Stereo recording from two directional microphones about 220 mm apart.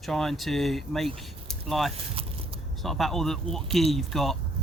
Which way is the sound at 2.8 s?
Centre (ahead or behind).